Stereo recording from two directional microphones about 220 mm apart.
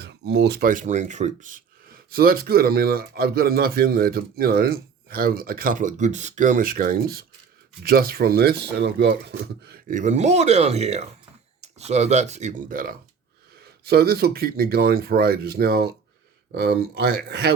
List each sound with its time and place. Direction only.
0.0 s speech: 50° right (ahead or behind)